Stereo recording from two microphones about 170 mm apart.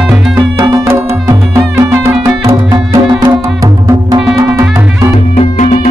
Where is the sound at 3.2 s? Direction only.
20° right (ahead or behind).